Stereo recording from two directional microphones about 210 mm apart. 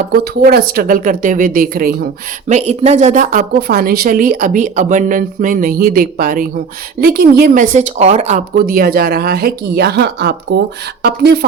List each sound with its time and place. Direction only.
0.1 s a woman's voice: 45° right (ahead or behind)
2.5 s a woman's voice: 30° right (ahead or behind); by 11.3 s 50° right (ahead or behind)